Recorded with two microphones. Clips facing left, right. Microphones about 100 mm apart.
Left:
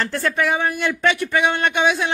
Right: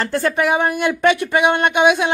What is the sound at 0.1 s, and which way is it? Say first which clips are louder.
Speech: right 3 dB; 15° right (ahead or behind).